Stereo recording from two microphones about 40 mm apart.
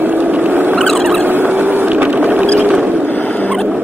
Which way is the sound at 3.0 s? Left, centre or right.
Left.